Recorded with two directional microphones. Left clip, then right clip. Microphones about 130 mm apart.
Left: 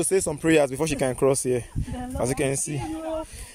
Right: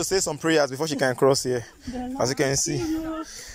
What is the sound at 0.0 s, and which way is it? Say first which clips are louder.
Speech: left 1 dB; 40° left (ahead or behind).